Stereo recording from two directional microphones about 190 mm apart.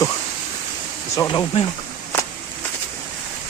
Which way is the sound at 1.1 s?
20° left (ahead or behind).